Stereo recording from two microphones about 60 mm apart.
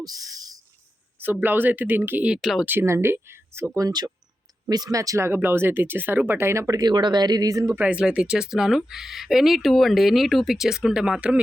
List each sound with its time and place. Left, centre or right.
0.0 s a sound: right
1.2 s speech: right
2.4 s speech: centre
2.6 s speech: right
3.8 s speech: right
5.2 s speech: right
7.3 s speech: right
7.8 s speech: centre